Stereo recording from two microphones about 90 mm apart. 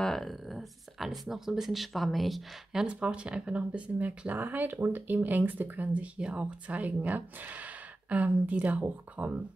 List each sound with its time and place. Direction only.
0.0 s speech: 5° left (ahead or behind); by 9.3 s 15° right (ahead or behind)